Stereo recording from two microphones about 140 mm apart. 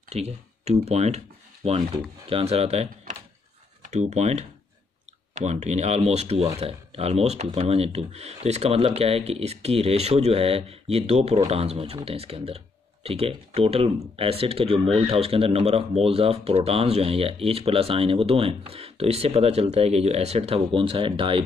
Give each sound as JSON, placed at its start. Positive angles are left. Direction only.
{"t": 0.1, "sound": "speech", "side_deg": -50}